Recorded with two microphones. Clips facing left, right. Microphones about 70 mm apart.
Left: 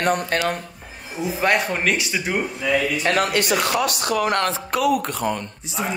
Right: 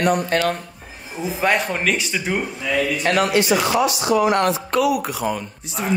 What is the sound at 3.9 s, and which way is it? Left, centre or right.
Speech, left.